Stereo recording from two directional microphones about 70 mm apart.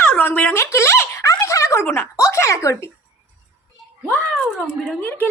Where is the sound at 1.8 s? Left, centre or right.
Left.